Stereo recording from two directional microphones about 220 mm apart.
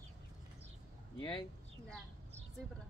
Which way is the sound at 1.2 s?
20° left (ahead or behind).